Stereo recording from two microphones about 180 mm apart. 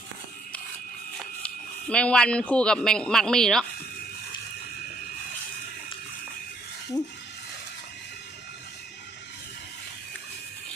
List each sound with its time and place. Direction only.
1.9 s speech: 5° left (ahead or behind)